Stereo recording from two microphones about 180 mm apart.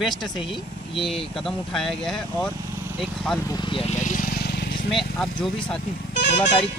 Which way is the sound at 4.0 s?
45° left (ahead or behind).